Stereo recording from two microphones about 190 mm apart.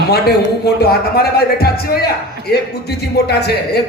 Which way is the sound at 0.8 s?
55° left (ahead or behind).